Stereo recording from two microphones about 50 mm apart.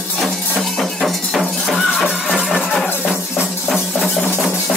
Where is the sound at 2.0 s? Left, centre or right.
Centre.